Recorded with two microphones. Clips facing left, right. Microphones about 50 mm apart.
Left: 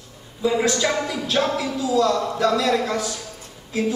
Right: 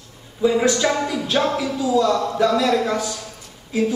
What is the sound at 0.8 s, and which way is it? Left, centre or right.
Speech, centre.